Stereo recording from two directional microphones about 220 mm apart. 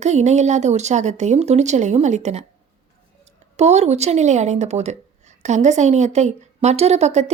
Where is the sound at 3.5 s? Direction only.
30° right (ahead or behind).